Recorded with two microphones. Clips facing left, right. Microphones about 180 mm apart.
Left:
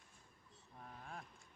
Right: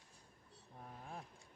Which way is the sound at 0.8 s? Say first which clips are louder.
Right 2 dB; 25° right (ahead or behind).